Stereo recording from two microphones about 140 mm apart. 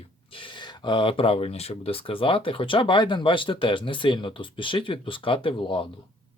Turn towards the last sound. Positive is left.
turn(degrees=40)  # may be behind; listen again after turning